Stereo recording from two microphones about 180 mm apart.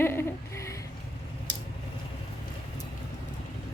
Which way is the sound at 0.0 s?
15° left (ahead or behind).